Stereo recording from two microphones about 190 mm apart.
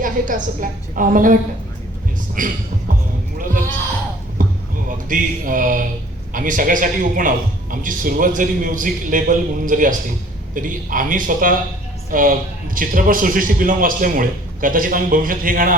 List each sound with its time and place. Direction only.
0.0 s a man's voice: 45° right (ahead or behind)
2.4 s a man's voice: 45° right (ahead or behind)
4.4 s a sound: 45° right (ahead or behind)
5.0 s a man's voice: 45° right (ahead or behind)